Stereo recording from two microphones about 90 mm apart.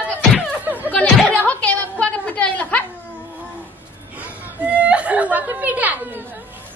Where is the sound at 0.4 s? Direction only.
20° right (ahead or behind).